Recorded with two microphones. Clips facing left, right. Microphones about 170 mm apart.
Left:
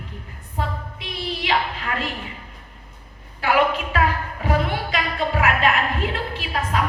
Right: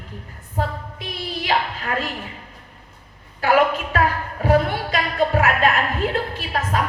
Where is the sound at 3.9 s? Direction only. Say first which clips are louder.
Right 3 dB; 40° right (ahead or behind).